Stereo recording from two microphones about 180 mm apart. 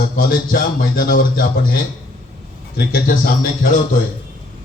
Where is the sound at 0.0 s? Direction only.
55° left (ahead or behind).